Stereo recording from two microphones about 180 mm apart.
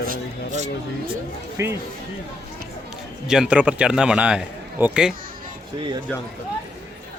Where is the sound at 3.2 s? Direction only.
5° right (ahead or behind).